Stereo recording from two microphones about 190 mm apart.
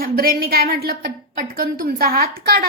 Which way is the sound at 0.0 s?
50° right (ahead or behind).